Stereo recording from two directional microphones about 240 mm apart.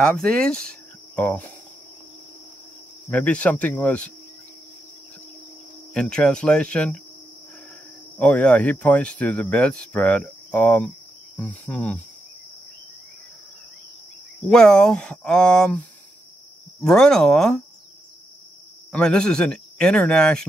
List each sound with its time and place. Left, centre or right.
0.0 s speech: centre
0.7 s cricket: centre
3.1 s speech: centre
5.9 s speech: centre
8.2 s speech: centre
14.5 s speech: centre
16.8 s speech: centre
18.9 s speech: centre